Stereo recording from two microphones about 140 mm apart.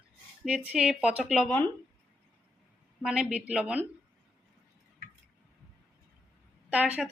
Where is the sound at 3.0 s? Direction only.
5° right (ahead or behind).